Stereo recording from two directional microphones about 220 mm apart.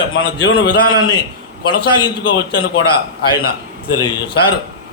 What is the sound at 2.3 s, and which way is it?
Speech, 60° left (ahead or behind).